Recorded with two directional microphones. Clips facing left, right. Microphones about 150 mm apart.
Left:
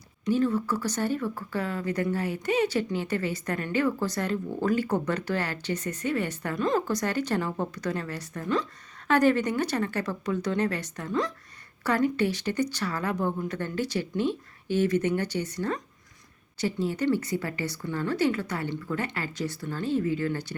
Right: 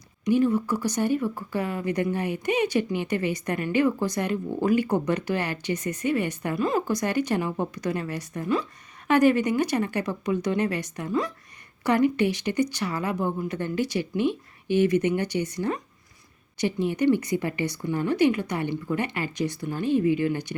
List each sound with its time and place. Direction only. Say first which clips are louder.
0.3 s speech: right 3 dB; 15° right (ahead or behind)